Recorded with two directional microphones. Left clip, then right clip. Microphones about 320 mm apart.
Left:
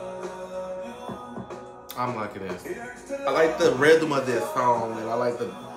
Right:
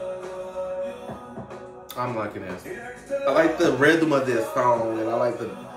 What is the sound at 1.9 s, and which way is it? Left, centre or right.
Speech, centre.